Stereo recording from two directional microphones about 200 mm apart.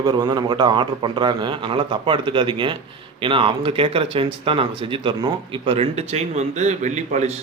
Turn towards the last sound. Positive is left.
turn(degrees=-35)  # may be behind; listen again after turning